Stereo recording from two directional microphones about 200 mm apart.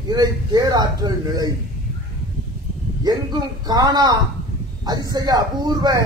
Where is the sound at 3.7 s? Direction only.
20° right (ahead or behind).